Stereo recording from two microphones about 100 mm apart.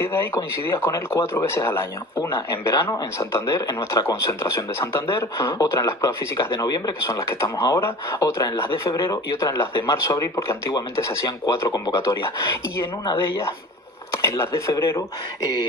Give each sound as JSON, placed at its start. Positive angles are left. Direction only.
{"t": 0.0, "sound": "speech", "side_deg": 25}
{"t": 14.1, "sound": "speech", "side_deg": 30}